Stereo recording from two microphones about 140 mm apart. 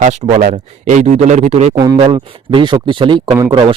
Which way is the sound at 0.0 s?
55° right (ahead or behind).